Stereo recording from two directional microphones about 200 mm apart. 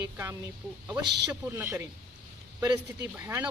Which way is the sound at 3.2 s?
15° right (ahead or behind).